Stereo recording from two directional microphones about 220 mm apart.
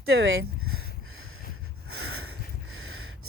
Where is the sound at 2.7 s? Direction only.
75° right (ahead or behind).